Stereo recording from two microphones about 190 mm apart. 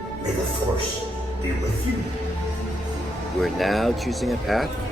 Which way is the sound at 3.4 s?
Centre (ahead or behind).